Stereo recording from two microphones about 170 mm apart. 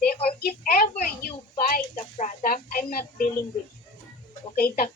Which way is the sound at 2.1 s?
50° left (ahead or behind).